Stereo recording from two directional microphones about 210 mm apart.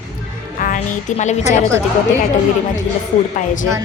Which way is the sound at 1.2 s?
35° left (ahead or behind).